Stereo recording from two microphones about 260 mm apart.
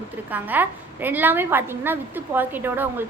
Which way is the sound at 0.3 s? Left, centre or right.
Centre.